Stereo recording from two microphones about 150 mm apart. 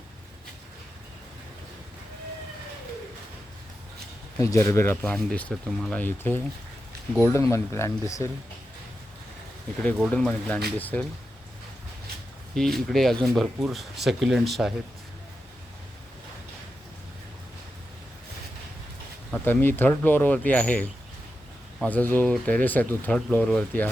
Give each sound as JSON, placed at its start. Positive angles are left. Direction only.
{"t": 4.4, "sound": "speech", "side_deg": 20}
{"t": 10.1, "sound": "speech", "side_deg": 10}
{"t": 12.5, "sound": "speech", "side_deg": 0}
{"t": 19.3, "sound": "speech", "side_deg": 15}
{"t": 21.8, "sound": "speech", "side_deg": 10}